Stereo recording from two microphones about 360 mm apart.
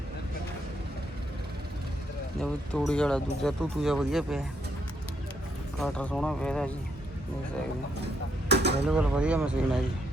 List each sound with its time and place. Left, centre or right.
2.4 s speech: centre
5.8 s speech: centre
8.4 s mechanisms: right
8.9 s speech: centre